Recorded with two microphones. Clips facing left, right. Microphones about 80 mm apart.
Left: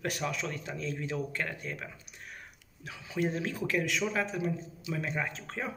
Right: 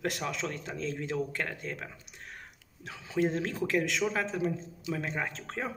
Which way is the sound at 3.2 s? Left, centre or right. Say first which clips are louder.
Right 1 dB; right.